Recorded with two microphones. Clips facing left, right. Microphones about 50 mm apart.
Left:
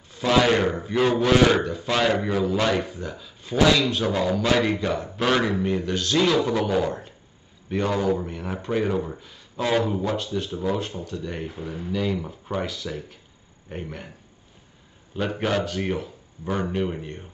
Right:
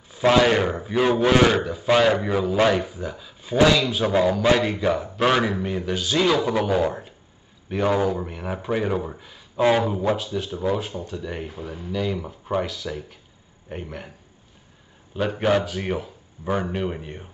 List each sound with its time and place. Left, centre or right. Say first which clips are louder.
0.2 s a man's voice: right 4 dB; right
0.6 s speech: even; centre
15.1 s speech: right 3 dB; centre